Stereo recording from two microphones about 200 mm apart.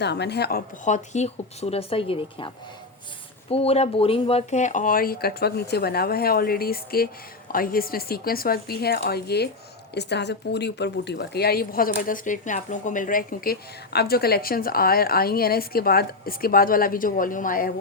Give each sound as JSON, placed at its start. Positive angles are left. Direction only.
{"t": 0.0, "sound": "a woman's voice", "side_deg": 55}
{"t": 0.9, "sound": "speech", "side_deg": 35}
{"t": 3.5, "sound": "speech", "side_deg": 30}